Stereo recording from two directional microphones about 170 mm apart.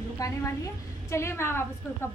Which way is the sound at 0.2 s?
20° left (ahead or behind).